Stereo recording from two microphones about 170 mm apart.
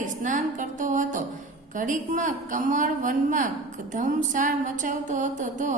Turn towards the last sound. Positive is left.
turn(degrees=-45)  # may be behind; listen again after turning